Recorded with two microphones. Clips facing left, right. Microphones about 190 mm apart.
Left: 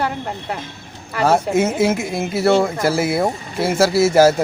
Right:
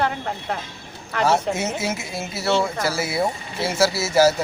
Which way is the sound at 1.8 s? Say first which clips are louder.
Left 9 dB; 55° left (ahead or behind).